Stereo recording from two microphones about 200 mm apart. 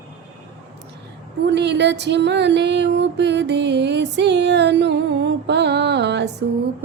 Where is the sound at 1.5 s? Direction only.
60° right (ahead or behind).